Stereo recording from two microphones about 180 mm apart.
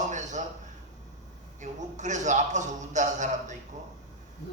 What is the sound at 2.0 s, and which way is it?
A man's voice, 40° right (ahead or behind).